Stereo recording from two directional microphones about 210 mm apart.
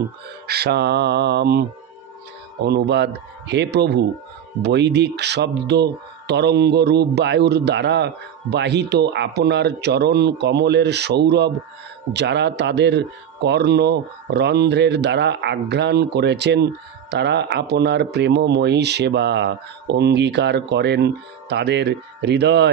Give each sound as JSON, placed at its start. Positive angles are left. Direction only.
{"t": 0.5, "sound": "a man's voice", "side_deg": -50}